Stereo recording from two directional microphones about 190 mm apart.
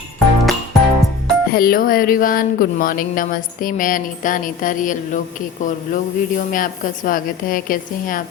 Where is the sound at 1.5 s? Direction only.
50° left (ahead or behind).